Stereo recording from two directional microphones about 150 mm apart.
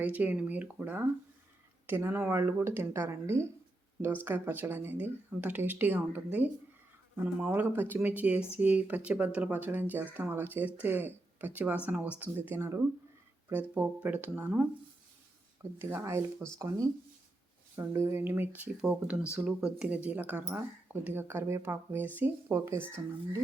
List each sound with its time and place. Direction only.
0.0 s speech: 10° right (ahead or behind)
15.8 s speech: 15° right (ahead or behind)